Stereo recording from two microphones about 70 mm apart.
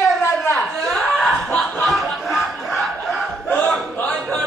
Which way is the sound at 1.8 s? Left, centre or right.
Centre.